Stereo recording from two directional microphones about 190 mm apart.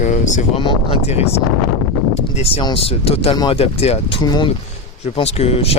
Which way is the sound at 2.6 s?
30° left (ahead or behind).